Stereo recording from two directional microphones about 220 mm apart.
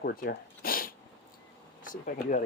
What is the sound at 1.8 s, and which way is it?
Speech, 35° left (ahead or behind).